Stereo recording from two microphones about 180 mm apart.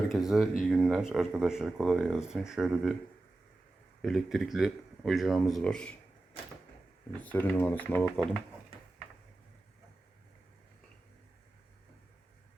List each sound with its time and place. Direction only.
0.1 s speech: centre (ahead or behind)
4.0 s speech: centre (ahead or behind)
7.2 s speech: 10° left (ahead or behind)